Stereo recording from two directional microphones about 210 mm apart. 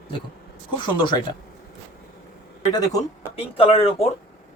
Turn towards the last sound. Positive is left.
turn(degrees=25)  # may be behind; listen again after turning